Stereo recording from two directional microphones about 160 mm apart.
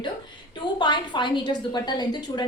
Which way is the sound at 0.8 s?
30° left (ahead or behind).